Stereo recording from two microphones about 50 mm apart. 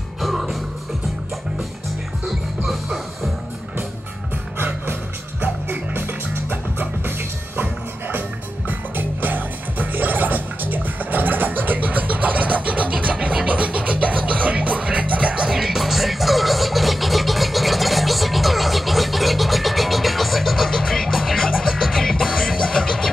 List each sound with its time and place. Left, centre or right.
0.2 s music: centre
2.2 s music: centre
4.6 s music: right
15.5 s music: centre